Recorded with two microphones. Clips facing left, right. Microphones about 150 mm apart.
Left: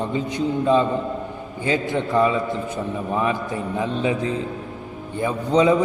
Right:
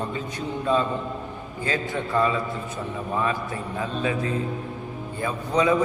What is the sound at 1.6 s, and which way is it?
A man's voice, 20° left (ahead or behind).